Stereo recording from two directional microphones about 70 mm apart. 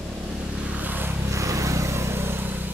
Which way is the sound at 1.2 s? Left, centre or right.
Right.